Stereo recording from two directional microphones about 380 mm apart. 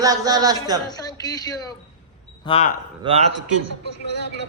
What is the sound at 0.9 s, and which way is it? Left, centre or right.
A man's voice, centre.